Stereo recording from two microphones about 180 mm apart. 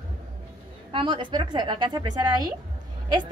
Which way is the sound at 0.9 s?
25° right (ahead or behind).